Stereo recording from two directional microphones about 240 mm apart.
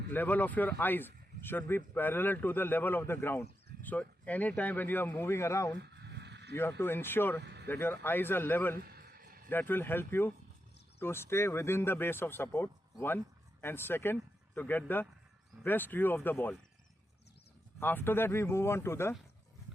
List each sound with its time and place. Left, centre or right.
0.1 s speech: centre
5.8 s a sound: right
6.5 s speech: centre
7.4 s vehicle: right
7.7 s speech: centre
8.8 s a sound: right
9.5 s speech: centre
17.7 s speech: centre